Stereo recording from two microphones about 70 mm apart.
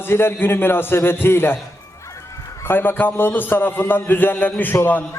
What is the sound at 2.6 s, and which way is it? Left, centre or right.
A man's voice, left.